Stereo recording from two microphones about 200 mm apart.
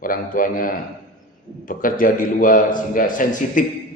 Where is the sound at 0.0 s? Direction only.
45° left (ahead or behind).